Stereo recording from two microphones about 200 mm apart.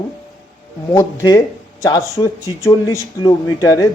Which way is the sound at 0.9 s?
20° left (ahead or behind).